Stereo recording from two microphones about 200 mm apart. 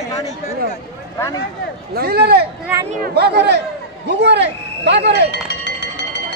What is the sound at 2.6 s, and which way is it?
Speech, 15° right (ahead or behind).